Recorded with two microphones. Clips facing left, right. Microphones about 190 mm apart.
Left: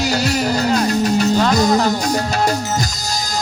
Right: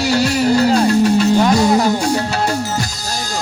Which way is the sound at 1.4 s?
10° right (ahead or behind).